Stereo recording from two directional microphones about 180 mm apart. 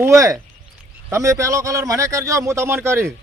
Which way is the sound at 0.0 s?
15° right (ahead or behind).